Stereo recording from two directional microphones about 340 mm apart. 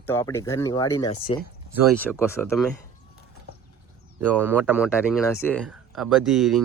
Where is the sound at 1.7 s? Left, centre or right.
Centre.